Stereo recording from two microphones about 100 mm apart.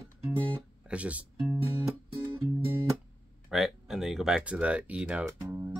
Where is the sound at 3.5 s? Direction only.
5° right (ahead or behind).